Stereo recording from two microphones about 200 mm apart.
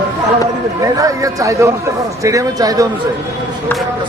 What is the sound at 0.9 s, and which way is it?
A man's voice, 15° right (ahead or behind).